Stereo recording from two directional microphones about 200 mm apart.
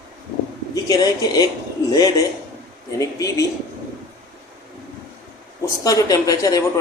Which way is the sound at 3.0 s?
15° left (ahead or behind).